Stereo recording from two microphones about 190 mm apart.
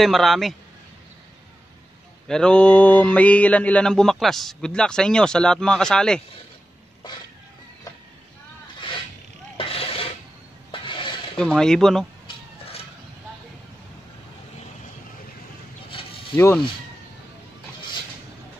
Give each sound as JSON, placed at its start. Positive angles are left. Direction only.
{"t": 0.0, "sound": "mantra", "side_deg": 0}
{"t": 2.2, "sound": "mantra", "side_deg": 5}
{"t": 8.8, "sound": "vehicle", "side_deg": 25}
{"t": 9.6, "sound": "a sound", "side_deg": 30}
{"t": 11.3, "sound": "mantra", "side_deg": 5}
{"t": 15.9, "sound": "a sound", "side_deg": 30}